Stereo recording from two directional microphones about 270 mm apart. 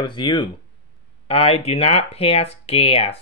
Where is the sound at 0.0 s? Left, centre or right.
Centre.